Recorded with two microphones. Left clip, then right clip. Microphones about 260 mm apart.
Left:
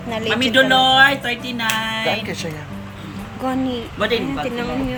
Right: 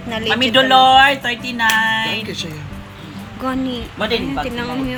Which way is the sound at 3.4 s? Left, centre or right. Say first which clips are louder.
Even; centre.